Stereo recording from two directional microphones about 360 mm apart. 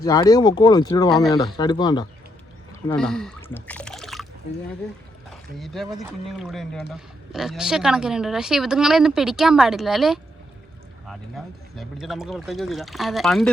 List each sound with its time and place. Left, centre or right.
0.0 s speech: centre
2.8 s a sound: centre
5.3 s a woman's voice: centre